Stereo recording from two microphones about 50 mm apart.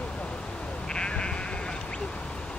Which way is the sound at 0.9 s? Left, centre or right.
Centre.